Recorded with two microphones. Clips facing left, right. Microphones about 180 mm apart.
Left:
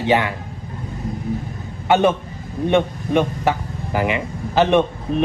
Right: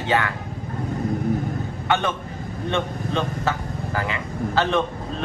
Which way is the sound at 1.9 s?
15° left (ahead or behind).